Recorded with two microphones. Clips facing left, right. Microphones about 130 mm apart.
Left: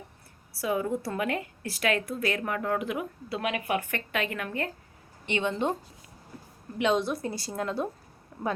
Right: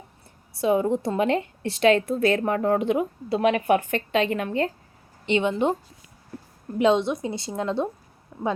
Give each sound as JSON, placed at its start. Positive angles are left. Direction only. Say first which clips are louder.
{"t": 0.6, "sound": "a woman's voice", "louder": "right 7 dB", "side_deg": -25}
{"t": 3.8, "sound": "a woman's voice", "louder": "right 7 dB", "side_deg": -25}
{"t": 6.7, "sound": "a woman's voice", "louder": "right 6 dB", "side_deg": -30}
{"t": 8.3, "sound": "a sound", "louder": "right 5 dB", "side_deg": -5}